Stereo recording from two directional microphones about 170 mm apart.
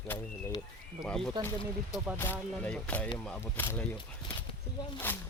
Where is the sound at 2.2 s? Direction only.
10° left (ahead or behind).